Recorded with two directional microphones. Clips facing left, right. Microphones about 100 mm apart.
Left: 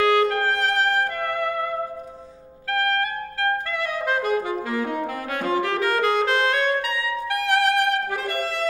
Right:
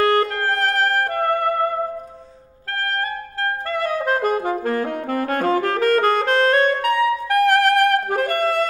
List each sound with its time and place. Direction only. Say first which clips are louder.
0.0 s music: right 1 dB; 45° right (ahead or behind)
3.7 s saxophone: right 4 dB; 40° right (ahead or behind)